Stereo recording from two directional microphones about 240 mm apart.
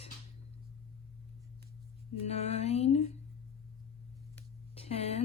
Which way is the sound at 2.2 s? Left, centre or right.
Left.